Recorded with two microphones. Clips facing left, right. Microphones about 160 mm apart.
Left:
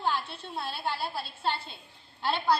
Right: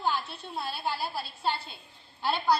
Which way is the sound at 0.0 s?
Centre (ahead or behind).